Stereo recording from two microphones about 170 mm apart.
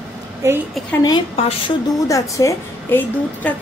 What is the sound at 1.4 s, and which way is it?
Speech, 35° left (ahead or behind).